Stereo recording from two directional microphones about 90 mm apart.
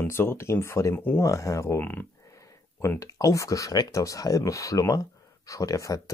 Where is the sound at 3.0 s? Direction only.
40° left (ahead or behind).